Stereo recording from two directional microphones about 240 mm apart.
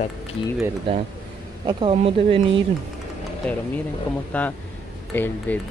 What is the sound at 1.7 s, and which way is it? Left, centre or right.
Speech, right.